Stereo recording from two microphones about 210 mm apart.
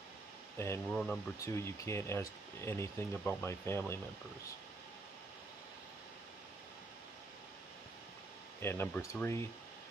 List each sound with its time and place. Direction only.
0.6 s speech: 10° left (ahead or behind)
1.4 s speech: 15° left (ahead or behind)
8.5 s speech: 10° left (ahead or behind)